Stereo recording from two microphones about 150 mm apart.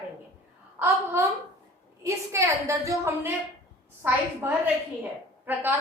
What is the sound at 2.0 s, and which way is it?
A woman's voice, 20° right (ahead or behind).